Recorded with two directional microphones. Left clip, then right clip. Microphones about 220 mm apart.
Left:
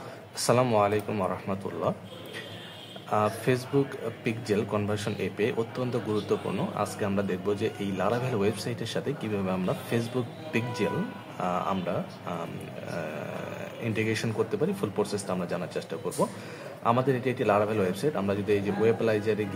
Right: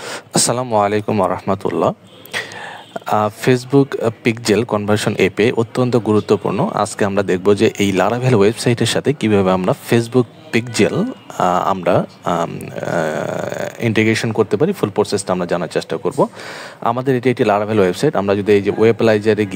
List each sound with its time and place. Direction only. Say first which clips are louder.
0.3 s speech: right 7 dB; 50° right (ahead or behind)